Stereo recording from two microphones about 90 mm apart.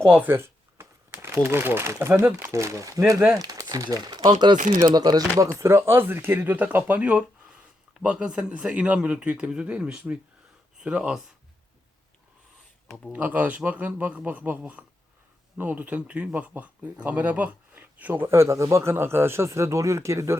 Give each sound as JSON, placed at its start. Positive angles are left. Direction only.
{"t": 0.1, "sound": "speech", "side_deg": -20}
{"t": 5.5, "sound": "speech", "side_deg": -30}
{"t": 13.1, "sound": "speech", "side_deg": -15}